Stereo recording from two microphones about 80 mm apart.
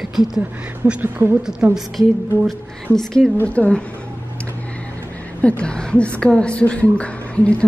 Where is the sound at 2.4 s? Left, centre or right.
Centre.